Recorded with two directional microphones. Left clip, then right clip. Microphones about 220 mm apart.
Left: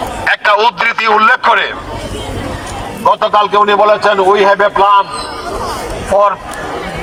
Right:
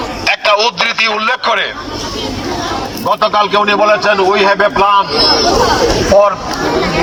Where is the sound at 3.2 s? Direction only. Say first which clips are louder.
Right 1 dB; 5° left (ahead or behind).